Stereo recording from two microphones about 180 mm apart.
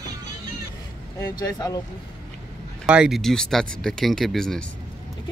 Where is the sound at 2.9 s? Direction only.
5° right (ahead or behind).